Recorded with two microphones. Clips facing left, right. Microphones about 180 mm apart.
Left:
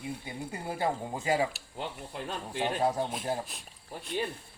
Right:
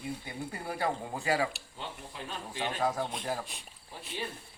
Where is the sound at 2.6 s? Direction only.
30° left (ahead or behind).